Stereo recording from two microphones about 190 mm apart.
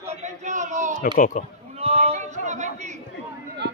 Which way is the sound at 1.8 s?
30° right (ahead or behind).